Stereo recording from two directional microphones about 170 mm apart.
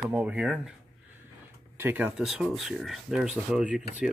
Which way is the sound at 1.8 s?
10° right (ahead or behind).